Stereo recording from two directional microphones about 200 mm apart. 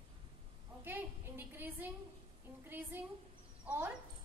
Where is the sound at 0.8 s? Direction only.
10° right (ahead or behind).